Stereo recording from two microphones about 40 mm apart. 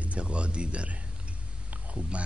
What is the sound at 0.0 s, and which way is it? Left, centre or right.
Speech, right.